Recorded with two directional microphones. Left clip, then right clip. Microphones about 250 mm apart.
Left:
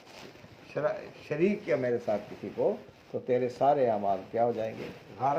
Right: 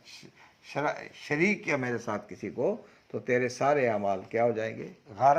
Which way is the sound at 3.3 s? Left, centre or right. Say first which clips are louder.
Even; right.